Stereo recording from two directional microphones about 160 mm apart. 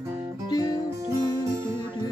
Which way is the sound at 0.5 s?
25° left (ahead or behind).